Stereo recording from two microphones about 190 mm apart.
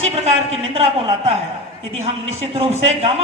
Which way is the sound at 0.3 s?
35° right (ahead or behind).